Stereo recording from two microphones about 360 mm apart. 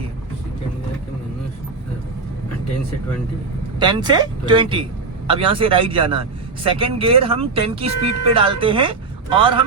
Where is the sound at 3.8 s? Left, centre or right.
Centre.